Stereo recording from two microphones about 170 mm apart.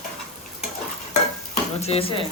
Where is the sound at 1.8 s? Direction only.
35° left (ahead or behind).